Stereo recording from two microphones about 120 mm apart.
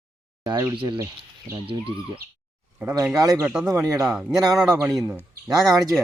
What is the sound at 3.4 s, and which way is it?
Speech, 5° right (ahead or behind).